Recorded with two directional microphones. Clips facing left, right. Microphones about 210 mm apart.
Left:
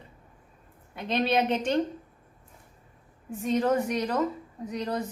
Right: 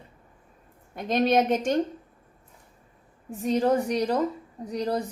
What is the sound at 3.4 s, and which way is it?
A woman's voice, 35° right (ahead or behind).